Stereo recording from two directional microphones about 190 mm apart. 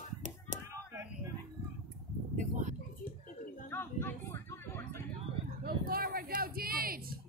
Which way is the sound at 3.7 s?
10° left (ahead or behind).